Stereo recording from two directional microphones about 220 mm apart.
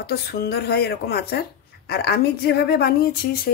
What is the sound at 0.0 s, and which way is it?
Speech, 45° left (ahead or behind).